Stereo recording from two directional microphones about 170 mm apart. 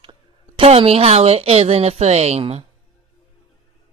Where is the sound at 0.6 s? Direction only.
35° right (ahead or behind).